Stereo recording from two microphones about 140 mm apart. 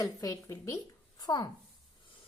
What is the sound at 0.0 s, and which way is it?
A woman's voice, 25° left (ahead or behind).